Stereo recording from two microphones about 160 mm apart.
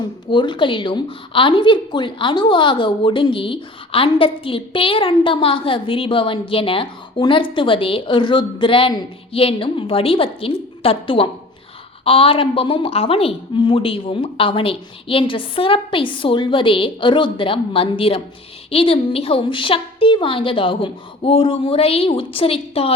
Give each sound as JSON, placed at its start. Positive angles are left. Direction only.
{"t": 0.3, "sound": "a woman's voice", "side_deg": 30}